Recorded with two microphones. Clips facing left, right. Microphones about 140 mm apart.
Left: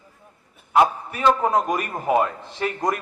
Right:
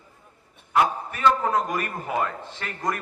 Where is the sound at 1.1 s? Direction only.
20° left (ahead or behind).